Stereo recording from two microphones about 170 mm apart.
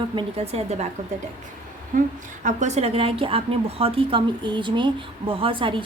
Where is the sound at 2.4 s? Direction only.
45° right (ahead or behind).